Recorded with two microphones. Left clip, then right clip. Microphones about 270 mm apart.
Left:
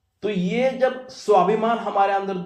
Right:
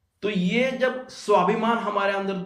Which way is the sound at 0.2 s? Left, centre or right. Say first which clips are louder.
Left 2 dB; centre.